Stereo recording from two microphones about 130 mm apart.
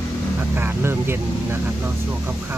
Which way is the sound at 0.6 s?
15° right (ahead or behind).